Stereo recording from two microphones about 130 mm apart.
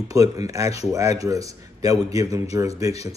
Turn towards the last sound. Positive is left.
turn(degrees=-25)  # may be behind; listen again after turning